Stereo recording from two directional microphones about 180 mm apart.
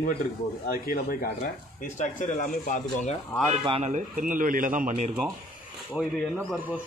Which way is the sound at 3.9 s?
45° right (ahead or behind).